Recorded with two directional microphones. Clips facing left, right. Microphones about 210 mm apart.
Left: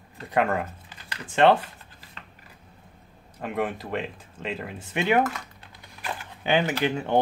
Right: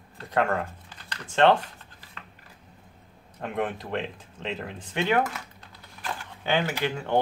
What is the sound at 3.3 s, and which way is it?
Speech, 5° left (ahead or behind).